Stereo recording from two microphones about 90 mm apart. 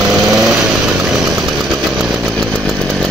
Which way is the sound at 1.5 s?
5° right (ahead or behind).